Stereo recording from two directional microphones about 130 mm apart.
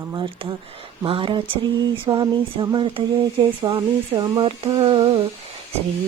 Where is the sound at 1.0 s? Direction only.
40° right (ahead or behind).